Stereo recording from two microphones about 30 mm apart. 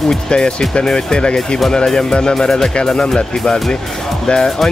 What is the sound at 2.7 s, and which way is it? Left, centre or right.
Speech, left.